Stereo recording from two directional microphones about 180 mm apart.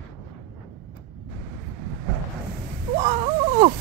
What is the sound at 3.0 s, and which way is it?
Wail, 30° right (ahead or behind).